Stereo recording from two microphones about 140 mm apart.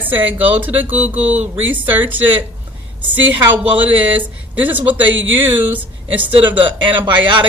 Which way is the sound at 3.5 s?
10° right (ahead or behind).